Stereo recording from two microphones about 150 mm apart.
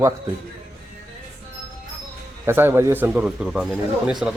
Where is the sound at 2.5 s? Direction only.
15° right (ahead or behind).